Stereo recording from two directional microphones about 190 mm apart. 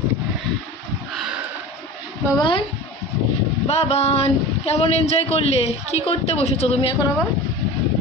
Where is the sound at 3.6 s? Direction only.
35° left (ahead or behind).